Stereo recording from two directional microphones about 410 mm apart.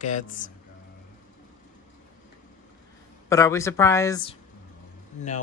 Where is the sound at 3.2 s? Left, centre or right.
Centre.